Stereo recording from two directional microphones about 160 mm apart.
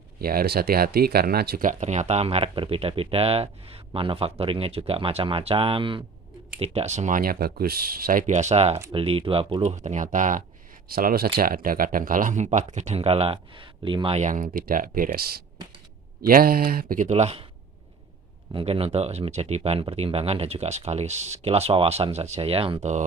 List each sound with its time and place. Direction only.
0.2 s speech: 70° right (ahead or behind)
1.8 s speech: 45° right (ahead or behind)
10.8 s speech: 70° right (ahead or behind); by 14.2 s 30° right (ahead or behind)
14.2 s speech: 50° right (ahead or behind)
18.5 s speech: 35° right (ahead or behind)